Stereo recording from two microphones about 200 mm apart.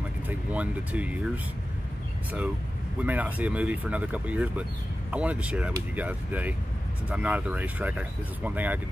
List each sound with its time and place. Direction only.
0.3 s speech: 5° right (ahead or behind)
3.0 s speech: 10° right (ahead or behind)